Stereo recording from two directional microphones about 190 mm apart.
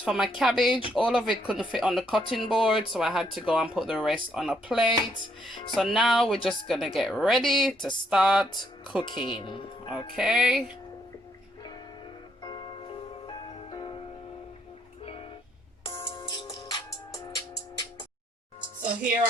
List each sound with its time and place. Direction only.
0.0 s speech: 5° right (ahead or behind)
9.0 s speech: 25° left (ahead or behind)
10.2 s speech: 5° right (ahead or behind)
12.4 s music: 20° left (ahead or behind)
16.0 s music: 25° left (ahead or behind)